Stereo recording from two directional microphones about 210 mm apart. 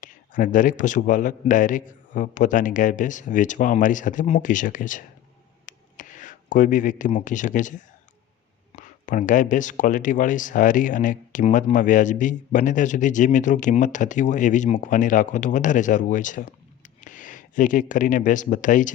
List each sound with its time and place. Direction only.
0.0 s speech: 40° left (ahead or behind)
5.6 s a sound: 40° left (ahead or behind)
8.7 s speech: 40° left (ahead or behind)